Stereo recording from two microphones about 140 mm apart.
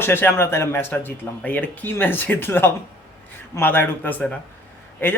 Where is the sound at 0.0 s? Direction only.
15° left (ahead or behind).